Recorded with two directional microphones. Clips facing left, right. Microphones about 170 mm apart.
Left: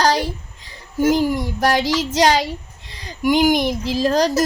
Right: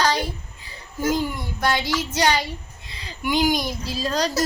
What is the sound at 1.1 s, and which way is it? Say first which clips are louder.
Speech: left 6 dB; 90° left.